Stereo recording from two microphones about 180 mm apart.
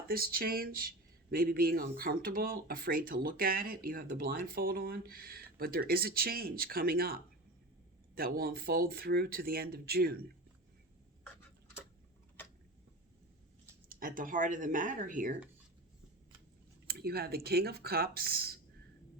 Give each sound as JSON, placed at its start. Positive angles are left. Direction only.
{"t": 0.1, "sound": "speech", "side_deg": -55}
{"t": 13.8, "sound": "speech", "side_deg": -50}
{"t": 16.8, "sound": "speech", "side_deg": -60}